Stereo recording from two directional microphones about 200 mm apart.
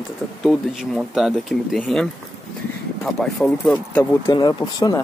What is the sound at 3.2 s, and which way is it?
Speech, 5° left (ahead or behind).